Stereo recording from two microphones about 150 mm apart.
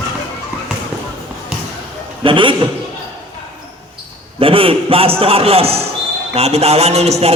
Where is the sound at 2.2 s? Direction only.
35° right (ahead or behind).